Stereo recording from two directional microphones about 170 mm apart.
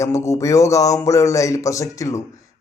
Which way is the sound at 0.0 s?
15° left (ahead or behind).